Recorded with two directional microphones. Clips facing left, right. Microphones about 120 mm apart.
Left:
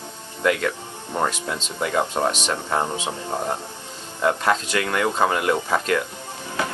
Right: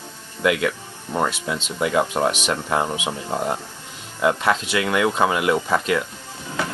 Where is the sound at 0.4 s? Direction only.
10° right (ahead or behind).